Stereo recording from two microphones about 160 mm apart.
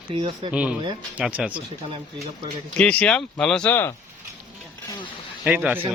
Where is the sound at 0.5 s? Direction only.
10° right (ahead or behind).